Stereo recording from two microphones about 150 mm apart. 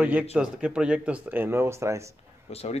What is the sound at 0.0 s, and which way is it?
Speech, 10° right (ahead or behind).